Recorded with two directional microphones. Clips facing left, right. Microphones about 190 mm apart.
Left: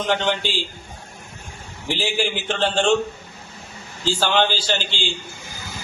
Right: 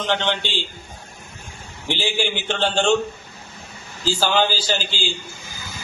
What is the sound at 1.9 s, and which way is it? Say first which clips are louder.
A man's voice: even; centre (ahead or behind).